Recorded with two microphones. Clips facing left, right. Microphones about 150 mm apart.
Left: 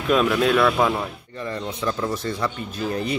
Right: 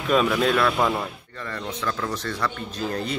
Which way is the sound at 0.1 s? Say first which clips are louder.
Left 2 dB; centre (ahead or behind).